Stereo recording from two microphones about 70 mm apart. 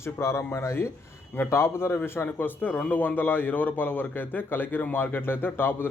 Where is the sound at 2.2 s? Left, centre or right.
Left.